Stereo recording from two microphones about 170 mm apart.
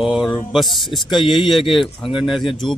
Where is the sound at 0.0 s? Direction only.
5° right (ahead or behind).